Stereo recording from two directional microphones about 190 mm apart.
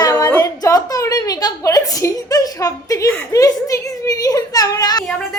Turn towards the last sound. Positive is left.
turn(degrees=20)  # may be behind; listen again after turning